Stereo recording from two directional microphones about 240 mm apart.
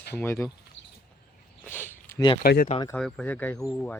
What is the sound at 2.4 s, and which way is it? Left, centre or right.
Speech, left.